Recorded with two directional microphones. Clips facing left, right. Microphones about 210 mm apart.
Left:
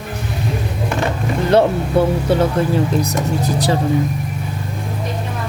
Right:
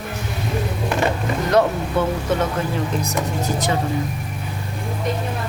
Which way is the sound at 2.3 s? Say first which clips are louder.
Left 6 dB; 30° left (ahead or behind).